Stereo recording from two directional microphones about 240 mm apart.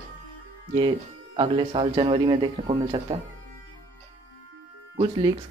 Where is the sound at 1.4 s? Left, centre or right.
Right.